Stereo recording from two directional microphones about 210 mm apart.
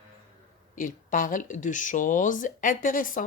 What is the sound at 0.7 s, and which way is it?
Speech, 40° left (ahead or behind).